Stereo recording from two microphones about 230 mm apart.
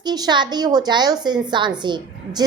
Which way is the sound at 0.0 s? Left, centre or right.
Centre.